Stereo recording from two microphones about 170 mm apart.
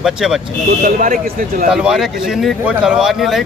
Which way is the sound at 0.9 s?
55° right (ahead or behind).